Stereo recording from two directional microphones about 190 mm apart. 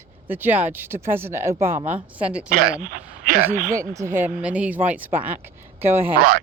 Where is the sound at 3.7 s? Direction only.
15° right (ahead or behind).